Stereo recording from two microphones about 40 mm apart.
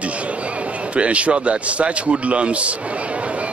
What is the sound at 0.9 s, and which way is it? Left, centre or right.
A man's voice, right.